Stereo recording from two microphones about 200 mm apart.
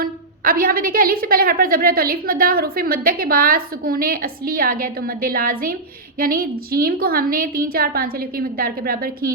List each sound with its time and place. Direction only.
0.0 s a woman's voice: 45° right (ahead or behind)